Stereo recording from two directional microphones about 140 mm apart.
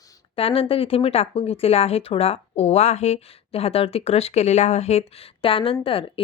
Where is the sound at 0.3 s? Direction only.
40° left (ahead or behind).